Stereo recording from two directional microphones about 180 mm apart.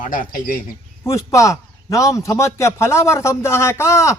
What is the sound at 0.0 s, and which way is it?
Speech, 50° left (ahead or behind).